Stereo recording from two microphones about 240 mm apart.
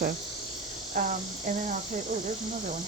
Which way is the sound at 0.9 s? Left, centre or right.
Right.